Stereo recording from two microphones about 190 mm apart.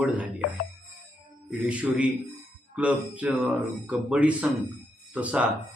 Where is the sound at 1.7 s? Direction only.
5° right (ahead or behind).